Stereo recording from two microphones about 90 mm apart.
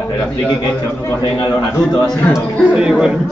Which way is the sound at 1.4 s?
50° left (ahead or behind).